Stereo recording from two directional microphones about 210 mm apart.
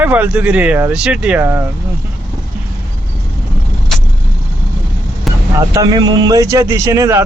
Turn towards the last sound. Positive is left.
turn(degrees=-15)  # may be behind; listen again after turning